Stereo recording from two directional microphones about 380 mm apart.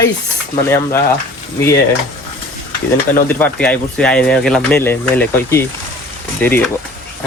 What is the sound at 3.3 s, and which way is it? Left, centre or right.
Speech, centre.